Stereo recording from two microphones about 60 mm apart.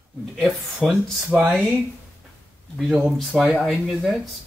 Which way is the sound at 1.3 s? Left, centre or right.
Centre.